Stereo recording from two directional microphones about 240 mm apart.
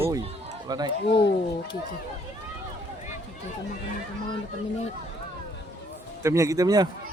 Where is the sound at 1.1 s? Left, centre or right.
Left.